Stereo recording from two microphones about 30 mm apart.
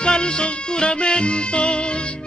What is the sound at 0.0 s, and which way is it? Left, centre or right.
Music, left.